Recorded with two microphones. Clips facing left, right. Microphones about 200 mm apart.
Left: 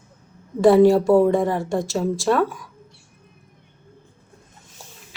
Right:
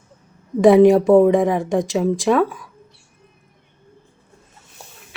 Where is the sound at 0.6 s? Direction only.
20° right (ahead or behind).